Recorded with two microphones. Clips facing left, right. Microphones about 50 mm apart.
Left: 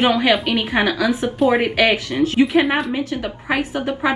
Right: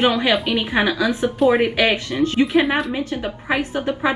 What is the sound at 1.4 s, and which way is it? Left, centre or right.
A woman's voice, centre.